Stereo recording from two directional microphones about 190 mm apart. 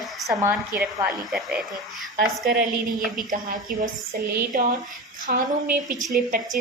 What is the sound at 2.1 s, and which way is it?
Speech, 50° right (ahead or behind).